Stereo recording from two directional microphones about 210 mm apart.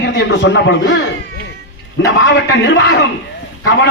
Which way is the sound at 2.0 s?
55° left (ahead or behind).